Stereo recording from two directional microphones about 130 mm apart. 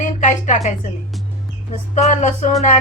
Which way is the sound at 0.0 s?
70° left (ahead or behind).